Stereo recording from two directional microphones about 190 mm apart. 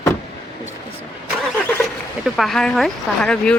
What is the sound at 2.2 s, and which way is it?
Speech, centre (ahead or behind).